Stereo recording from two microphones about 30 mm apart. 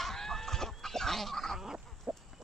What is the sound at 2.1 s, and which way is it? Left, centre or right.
Chicken, right.